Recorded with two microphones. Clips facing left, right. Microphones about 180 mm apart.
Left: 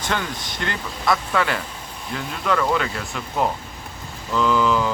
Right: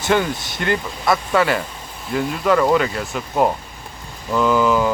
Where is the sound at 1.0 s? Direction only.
25° right (ahead or behind).